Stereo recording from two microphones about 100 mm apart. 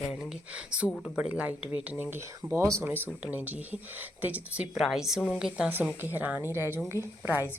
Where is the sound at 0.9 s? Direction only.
10° left (ahead or behind).